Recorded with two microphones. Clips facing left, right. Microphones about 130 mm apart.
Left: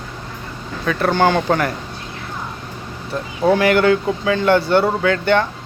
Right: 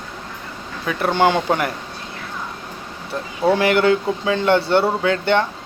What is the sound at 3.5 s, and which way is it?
Speech, 25° right (ahead or behind).